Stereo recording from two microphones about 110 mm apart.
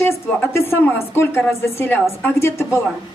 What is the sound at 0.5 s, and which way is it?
A woman's voice, 25° left (ahead or behind).